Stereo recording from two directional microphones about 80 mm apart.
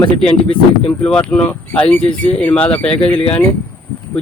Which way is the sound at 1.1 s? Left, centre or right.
Centre.